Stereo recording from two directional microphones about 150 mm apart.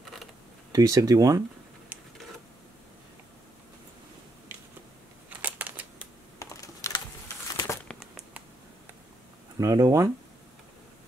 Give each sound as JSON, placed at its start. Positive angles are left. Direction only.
{"t": 0.7, "sound": "speech", "side_deg": -20}
{"t": 5.4, "sound": "a sound", "side_deg": -10}
{"t": 6.4, "sound": "computer keyboard", "side_deg": 20}
{"t": 7.5, "sound": "crumpling", "side_deg": 20}
{"t": 7.9, "sound": "a sound", "side_deg": 0}
{"t": 9.6, "sound": "speech", "side_deg": -20}